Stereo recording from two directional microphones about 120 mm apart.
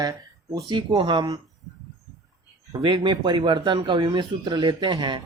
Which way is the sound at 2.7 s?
35° right (ahead or behind).